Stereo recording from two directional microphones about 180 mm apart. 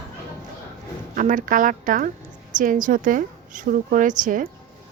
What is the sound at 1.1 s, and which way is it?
A woman's voice, 45° right (ahead or behind).